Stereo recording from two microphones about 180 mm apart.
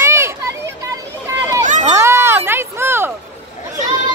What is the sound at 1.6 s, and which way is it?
Run, 45° right (ahead or behind).